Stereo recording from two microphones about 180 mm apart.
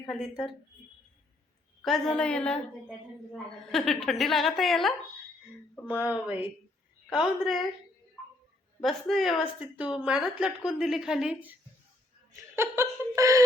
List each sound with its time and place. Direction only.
0.1 s a woman's voice: centre (ahead or behind)
1.8 s a woman's voice: centre (ahead or behind)
3.7 s a woman's voice: centre (ahead or behind)
5.9 s a sound: 10° right (ahead or behind)
7.1 s a woman's voice: centre (ahead or behind)
8.8 s a woman's voice: centre (ahead or behind)
12.5 s a sound: 15° right (ahead or behind)